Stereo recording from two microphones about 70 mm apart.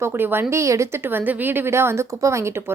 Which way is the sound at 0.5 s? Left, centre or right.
Right.